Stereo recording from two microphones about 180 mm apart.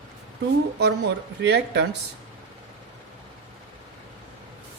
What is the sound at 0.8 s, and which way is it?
Speech, 65° right (ahead or behind).